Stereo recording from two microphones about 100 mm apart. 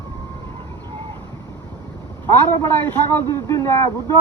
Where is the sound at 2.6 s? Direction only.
20° left (ahead or behind).